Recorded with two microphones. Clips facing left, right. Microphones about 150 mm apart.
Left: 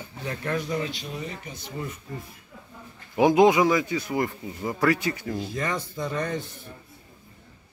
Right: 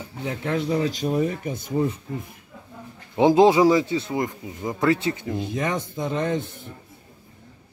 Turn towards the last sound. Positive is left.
turn(degrees=-20)  # may be behind; listen again after turning